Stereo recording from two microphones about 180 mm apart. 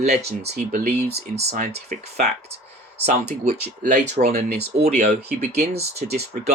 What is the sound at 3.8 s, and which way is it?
Speech, 45° right (ahead or behind).